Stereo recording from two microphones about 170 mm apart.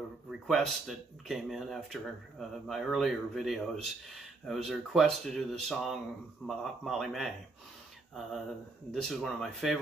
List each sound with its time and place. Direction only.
0.3 s speech: centre (ahead or behind)
8.9 s speech: centre (ahead or behind)